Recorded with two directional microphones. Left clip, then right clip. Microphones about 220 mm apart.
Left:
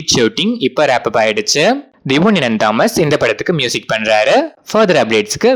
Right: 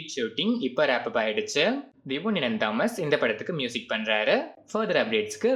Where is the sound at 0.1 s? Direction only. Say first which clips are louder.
Left 15 dB; 45° left (ahead or behind).